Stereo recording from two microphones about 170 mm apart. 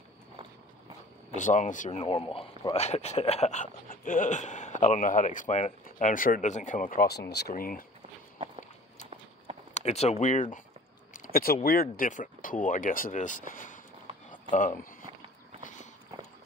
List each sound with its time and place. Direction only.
1.3 s speech: 45° left (ahead or behind)
9.8 s speech: 40° left (ahead or behind)
11.1 s speech: 60° left (ahead or behind)